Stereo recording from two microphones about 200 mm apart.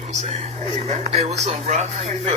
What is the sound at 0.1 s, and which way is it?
Speech, 35° right (ahead or behind).